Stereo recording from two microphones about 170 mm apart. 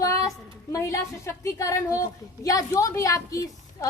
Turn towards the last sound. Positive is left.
turn(degrees=20)  # may be behind; listen again after turning